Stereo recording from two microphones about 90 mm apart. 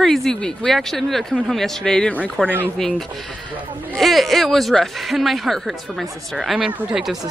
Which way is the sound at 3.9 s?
Centre (ahead or behind).